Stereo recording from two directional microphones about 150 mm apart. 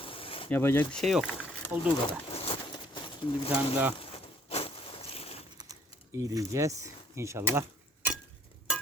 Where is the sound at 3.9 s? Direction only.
40° left (ahead or behind).